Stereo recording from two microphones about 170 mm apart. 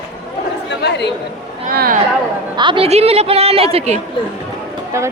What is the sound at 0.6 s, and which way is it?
Speech, 85° left.